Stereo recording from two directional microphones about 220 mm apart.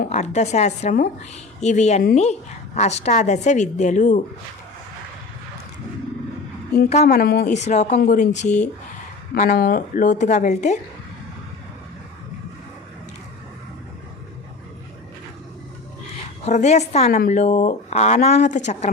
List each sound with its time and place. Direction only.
0.1 s a woman's voice: 30° left (ahead or behind)
6.9 s a woman's voice: 35° left (ahead or behind)
9.3 s a woman's voice: 45° left (ahead or behind)
16.5 s a woman's voice: 30° left (ahead or behind)